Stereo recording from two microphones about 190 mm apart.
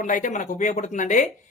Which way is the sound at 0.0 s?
45° left (ahead or behind).